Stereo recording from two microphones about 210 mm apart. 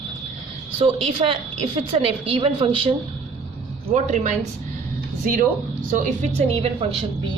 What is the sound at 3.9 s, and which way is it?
Speech, 35° right (ahead or behind).